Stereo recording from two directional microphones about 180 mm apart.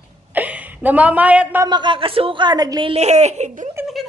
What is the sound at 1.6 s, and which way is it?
A woman's voice, 25° right (ahead or behind).